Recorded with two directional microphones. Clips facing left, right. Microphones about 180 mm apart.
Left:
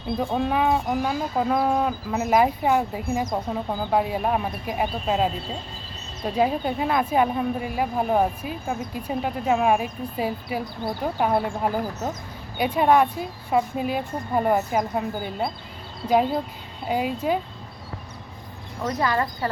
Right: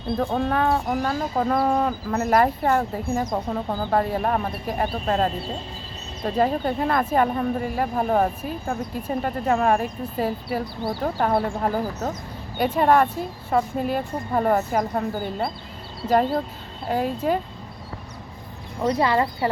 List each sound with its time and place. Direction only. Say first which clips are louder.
0.2 s speech: even; 5° left (ahead or behind)
16.8 s speech: right 1 dB; 5° left (ahead or behind)
18.9 s speech: right 2 dB; 25° right (ahead or behind)